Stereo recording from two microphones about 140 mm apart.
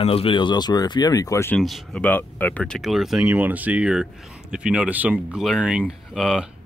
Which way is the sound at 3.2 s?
15° right (ahead or behind).